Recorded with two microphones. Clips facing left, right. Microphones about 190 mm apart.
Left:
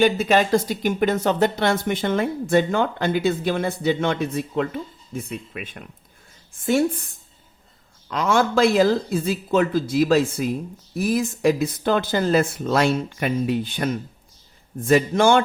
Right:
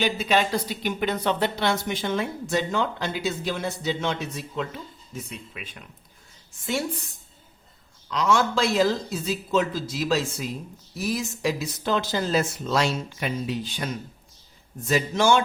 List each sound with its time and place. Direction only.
0.0 s speech: 50° left (ahead or behind)
8.1 s speech: 55° left (ahead or behind)